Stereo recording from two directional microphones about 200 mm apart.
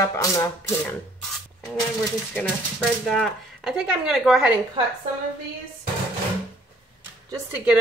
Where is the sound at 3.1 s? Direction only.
Centre (ahead or behind).